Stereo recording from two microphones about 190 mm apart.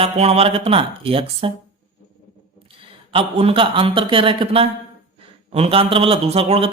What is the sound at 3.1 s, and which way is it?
Speech, 30° right (ahead or behind).